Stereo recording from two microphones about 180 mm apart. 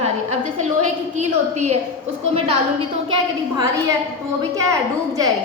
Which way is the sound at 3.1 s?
20° right (ahead or behind).